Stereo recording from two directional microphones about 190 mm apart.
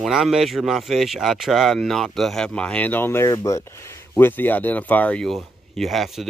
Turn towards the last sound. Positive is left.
turn(degrees=0)  # may be behind; listen again after turning